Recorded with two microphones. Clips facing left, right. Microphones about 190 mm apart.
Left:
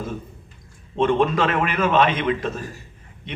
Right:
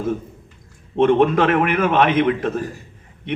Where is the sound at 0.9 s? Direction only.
60° right (ahead or behind).